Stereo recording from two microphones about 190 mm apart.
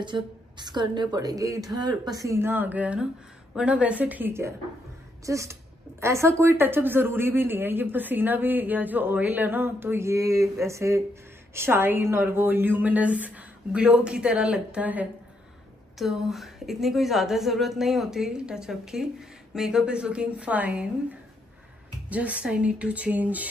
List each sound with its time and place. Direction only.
0.0 s a woman's voice: 25° right (ahead or behind); by 23.5 s 10° right (ahead or behind)